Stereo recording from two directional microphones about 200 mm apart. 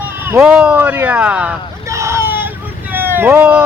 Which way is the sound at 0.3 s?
5° right (ahead or behind).